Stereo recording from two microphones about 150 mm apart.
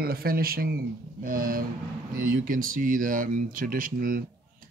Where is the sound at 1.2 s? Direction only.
70° right (ahead or behind).